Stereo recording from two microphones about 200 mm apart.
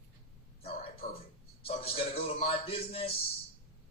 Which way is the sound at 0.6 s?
30° left (ahead or behind).